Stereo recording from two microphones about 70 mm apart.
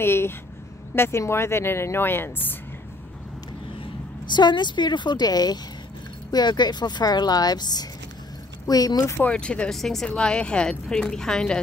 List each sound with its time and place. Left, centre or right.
0.0 s a woman's voice: left
4.3 s a woman's voice: left
6.3 s a woman's voice: left
8.6 s speech: left
9.2 s a woman's voice: centre
9.7 s a woman's voice: centre